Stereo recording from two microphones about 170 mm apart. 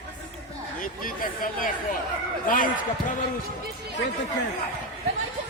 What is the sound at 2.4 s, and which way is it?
Speech, 50° left (ahead or behind).